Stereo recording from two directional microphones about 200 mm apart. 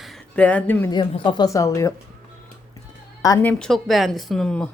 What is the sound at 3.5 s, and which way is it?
Speech, 5° left (ahead or behind).